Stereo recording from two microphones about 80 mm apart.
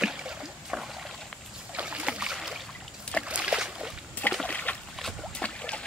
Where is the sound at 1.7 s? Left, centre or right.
Centre.